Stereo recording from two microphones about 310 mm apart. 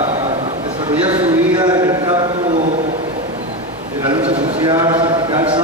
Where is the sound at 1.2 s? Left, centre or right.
Centre.